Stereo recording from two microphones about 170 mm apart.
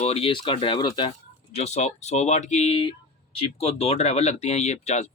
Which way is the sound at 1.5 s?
40° left (ahead or behind).